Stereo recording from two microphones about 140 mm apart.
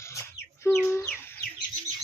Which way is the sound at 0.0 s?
20° left (ahead or behind).